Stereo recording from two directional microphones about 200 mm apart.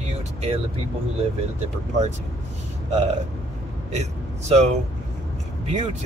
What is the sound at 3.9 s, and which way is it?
Speech, 35° right (ahead or behind).